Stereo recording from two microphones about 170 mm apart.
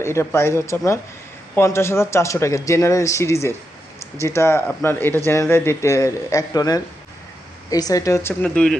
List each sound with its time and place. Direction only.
0.0 s speech: 15° left (ahead or behind)